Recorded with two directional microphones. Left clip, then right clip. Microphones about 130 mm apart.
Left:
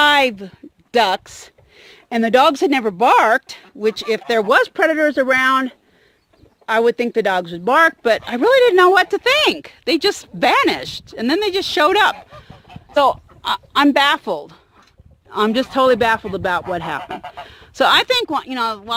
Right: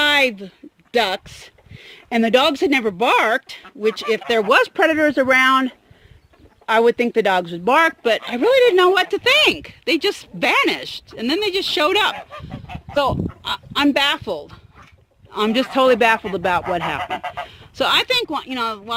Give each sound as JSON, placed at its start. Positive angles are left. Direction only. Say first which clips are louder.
{"t": 0.0, "sound": "a sound", "louder": "left 3 dB", "side_deg": 35}
{"t": 1.8, "sound": "a sound", "louder": "even", "side_deg": 15}
{"t": 2.3, "sound": "speech", "louder": "left 3 dB", "side_deg": 35}
{"t": 4.6, "sound": "speech", "louder": "left 1 dB", "side_deg": 0}
{"t": 7.8, "sound": "speech", "louder": "left 4 dB", "side_deg": 25}
{"t": 8.3, "sound": "speech", "louder": "left 1 dB", "side_deg": 40}
{"t": 12.1, "sound": "goose", "louder": "right 5 dB", "side_deg": 0}
{"t": 12.9, "sound": "speech", "louder": "left 4 dB", "side_deg": 55}
{"t": 15.5, "sound": "speech", "louder": "even", "side_deg": 15}
{"t": 17.5, "sound": "speech", "louder": "left 5 dB", "side_deg": 45}